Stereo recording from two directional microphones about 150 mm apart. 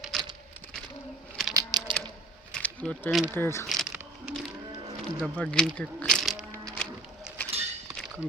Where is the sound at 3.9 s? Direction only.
10° right (ahead or behind).